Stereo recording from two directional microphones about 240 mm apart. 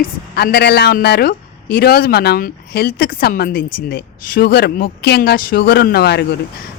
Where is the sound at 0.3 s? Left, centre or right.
Left.